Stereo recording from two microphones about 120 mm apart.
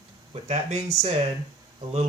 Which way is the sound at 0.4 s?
65° right (ahead or behind).